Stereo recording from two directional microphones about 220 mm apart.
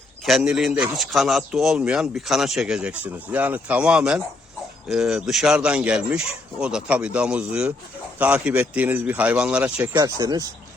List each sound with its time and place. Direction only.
0.3 s a man's voice: centre (ahead or behind)
9.9 s speech: 15° right (ahead or behind)